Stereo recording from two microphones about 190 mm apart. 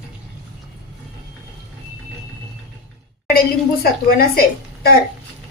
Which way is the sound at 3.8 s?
50° left (ahead or behind).